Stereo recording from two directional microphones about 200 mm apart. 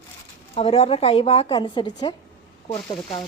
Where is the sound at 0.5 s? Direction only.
30° left (ahead or behind).